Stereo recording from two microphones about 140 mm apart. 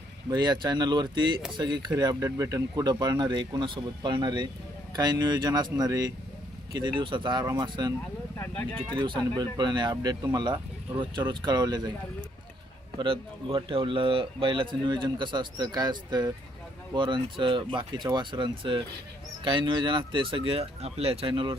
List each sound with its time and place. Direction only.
0.3 s a man's voice: 30° right (ahead or behind)
8.4 s speech: 10° left (ahead or behind)
9.3 s a man's voice: 30° right (ahead or behind)
13.0 s a man's voice: 35° right (ahead or behind)